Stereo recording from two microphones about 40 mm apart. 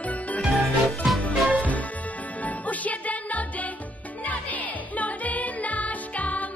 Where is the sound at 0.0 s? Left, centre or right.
Left.